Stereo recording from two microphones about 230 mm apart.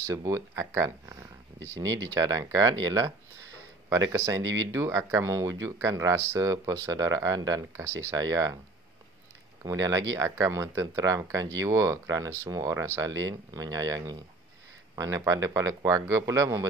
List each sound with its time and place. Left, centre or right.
0.0 s speech: centre
4.1 s speech: centre
4.4 s speech: right
4.7 s speech: centre
9.6 s speech: centre